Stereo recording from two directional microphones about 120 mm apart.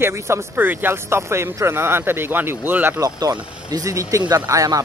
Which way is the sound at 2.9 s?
30° right (ahead or behind).